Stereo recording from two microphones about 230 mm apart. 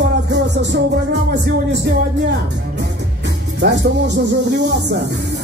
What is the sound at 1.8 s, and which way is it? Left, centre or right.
Speech, right.